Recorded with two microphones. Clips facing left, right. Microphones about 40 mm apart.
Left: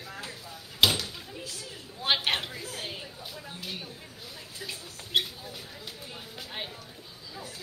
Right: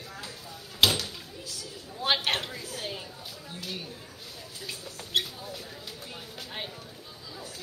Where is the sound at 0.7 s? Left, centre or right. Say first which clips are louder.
Even; centre.